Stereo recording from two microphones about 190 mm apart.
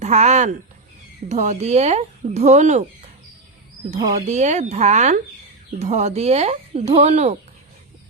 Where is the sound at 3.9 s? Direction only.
20° right (ahead or behind).